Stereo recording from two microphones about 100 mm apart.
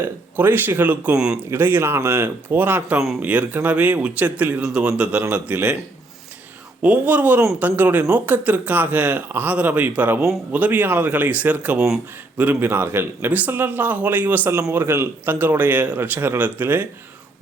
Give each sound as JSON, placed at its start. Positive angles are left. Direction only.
{"t": 0.0, "sound": "a man's voice", "side_deg": -20}
{"t": 1.5, "sound": "a man's voice", "side_deg": -20}
{"t": 6.8, "sound": "a man's voice", "side_deg": -15}